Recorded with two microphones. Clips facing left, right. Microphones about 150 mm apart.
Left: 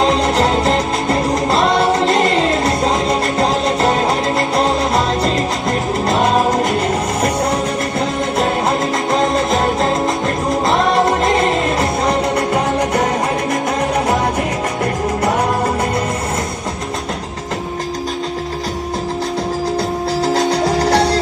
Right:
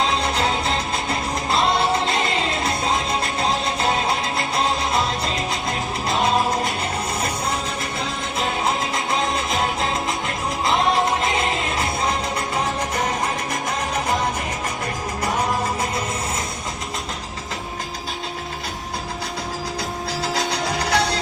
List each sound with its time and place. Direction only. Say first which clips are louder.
0.0 s music: left 7 dB; 40° left (ahead or behind)
7.9 s music: left 10 dB; 40° left (ahead or behind)
12.5 s music: left 8 dB; 70° left (ahead or behind)
15.2 s music: left 5 dB; 60° left (ahead or behind)
20.2 s music: left 9 dB; 50° left (ahead or behind)